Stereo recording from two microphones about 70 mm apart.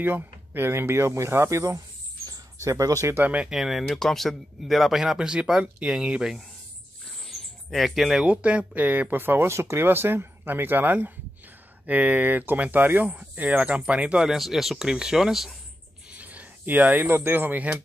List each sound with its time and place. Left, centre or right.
0.0 s speech: right
3.4 s speech: centre
7.2 s bird: centre
8.3 s speech: centre
14.3 s speech: centre
16.1 s speech: right